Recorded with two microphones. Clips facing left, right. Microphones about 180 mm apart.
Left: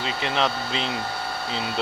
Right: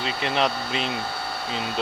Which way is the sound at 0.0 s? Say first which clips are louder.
Even; 20° left (ahead or behind).